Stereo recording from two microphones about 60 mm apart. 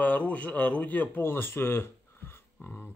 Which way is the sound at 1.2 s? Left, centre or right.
Left.